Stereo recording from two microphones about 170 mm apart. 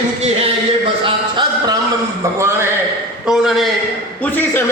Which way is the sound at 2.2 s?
15° right (ahead or behind).